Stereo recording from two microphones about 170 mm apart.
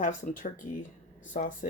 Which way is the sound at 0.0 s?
50° left (ahead or behind).